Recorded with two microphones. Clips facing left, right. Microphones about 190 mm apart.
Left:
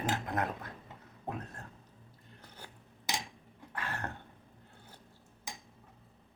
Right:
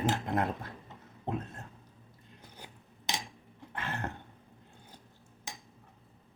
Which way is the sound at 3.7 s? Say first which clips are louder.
Right 2 dB; 25° right (ahead or behind).